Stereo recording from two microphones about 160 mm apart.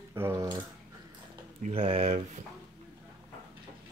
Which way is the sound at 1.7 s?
35° right (ahead or behind).